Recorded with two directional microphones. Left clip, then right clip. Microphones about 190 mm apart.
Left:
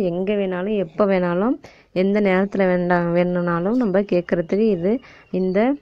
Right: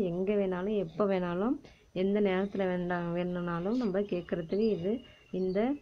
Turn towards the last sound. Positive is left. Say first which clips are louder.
# left 12 dB
turn(degrees=45)  # may be behind; listen again after turning